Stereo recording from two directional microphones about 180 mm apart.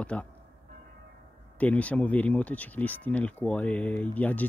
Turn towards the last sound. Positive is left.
turn(degrees=10)  # may be behind; listen again after turning